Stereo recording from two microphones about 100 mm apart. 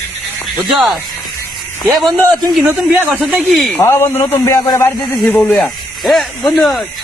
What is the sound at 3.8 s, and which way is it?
A man's voice, 25° left (ahead or behind).